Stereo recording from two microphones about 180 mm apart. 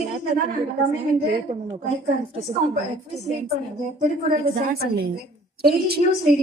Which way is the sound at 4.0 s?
45° right (ahead or behind).